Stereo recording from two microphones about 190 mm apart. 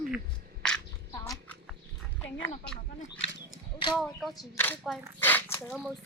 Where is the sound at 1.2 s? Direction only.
15° left (ahead or behind).